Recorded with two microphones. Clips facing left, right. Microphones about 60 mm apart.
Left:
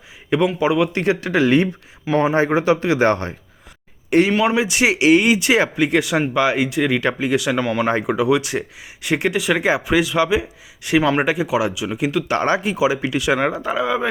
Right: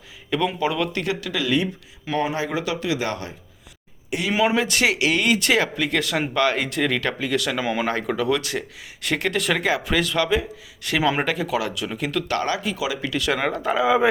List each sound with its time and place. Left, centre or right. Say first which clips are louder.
0.6 s speech: left 6 dB; centre; by 3.3 s left
4.3 s speech: left 3 dB; centre
4.5 s speech: left 3 dB; centre
7.6 s speech: left 4 dB; centre
7.9 s speech: left 5 dB; centre
12.4 s speech: left 7 dB; left; by 14.1 s centre